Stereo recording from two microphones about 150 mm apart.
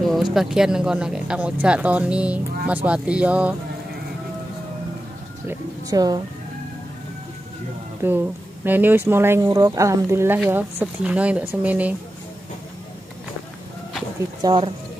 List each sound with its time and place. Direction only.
0.1 s speech: centre (ahead or behind)
5.5 s speech: 25° right (ahead or behind)
8.0 s speech: 15° right (ahead or behind)
14.4 s speech: 35° right (ahead or behind)